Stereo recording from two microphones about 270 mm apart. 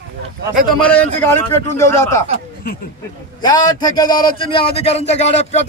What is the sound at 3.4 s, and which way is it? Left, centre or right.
Speech, centre.